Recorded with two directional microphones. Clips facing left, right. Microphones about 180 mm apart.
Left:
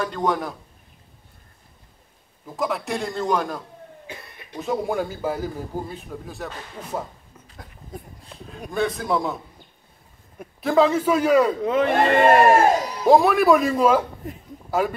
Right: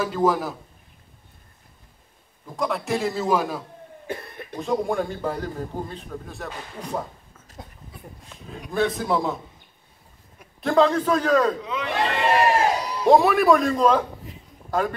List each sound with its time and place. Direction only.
0.0 s a man's voice: 5° right (ahead or behind)
2.5 s a man's voice: centre (ahead or behind)
4.1 s cough: 50° right (ahead or behind)
4.6 s a man's voice: 5° left (ahead or behind)
7.9 s speech: 45° left (ahead or behind)
8.5 s a man's voice: centre (ahead or behind)
10.6 s a man's voice: centre (ahead or behind)
11.6 s speech: 50° left (ahead or behind)
13.0 s a man's voice: centre (ahead or behind)
14.2 s speech: 50° left (ahead or behind)
14.7 s a man's voice: 5° left (ahead or behind)